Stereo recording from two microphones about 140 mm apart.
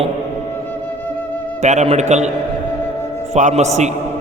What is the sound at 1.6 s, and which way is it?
Speech, 55° right (ahead or behind).